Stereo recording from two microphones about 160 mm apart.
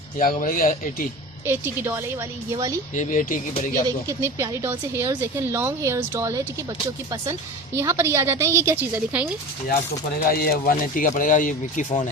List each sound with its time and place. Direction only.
0.2 s speech: 60° left (ahead or behind)
1.5 s speech: 15° right (ahead or behind)
2.9 s speech: 50° left (ahead or behind)
3.8 s speech: 20° right (ahead or behind)
7.8 s speech: 15° right (ahead or behind)
10.2 s speech: 70° left (ahead or behind); by 12.0 s 50° left (ahead or behind)